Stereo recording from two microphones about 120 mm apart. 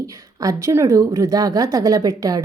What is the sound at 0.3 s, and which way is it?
A woman's voice, 25° right (ahead or behind).